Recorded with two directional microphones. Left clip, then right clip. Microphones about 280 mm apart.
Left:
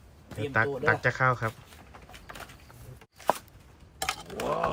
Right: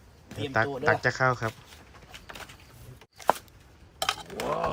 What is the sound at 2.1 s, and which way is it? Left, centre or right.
Bird, centre.